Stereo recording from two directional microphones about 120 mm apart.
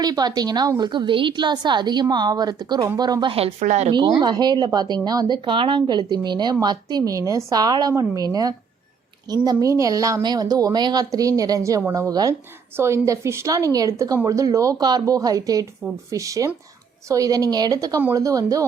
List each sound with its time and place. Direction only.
0.0 s speech: 35° right (ahead or behind)
3.3 s a woman's voice: 55° right (ahead or behind)
3.7 s speech: 70° right (ahead or behind)
3.9 s a woman's voice: 35° right (ahead or behind)